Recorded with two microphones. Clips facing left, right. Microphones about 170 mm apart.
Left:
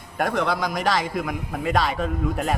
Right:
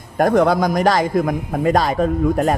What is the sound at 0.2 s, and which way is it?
A man's voice, 45° right (ahead or behind).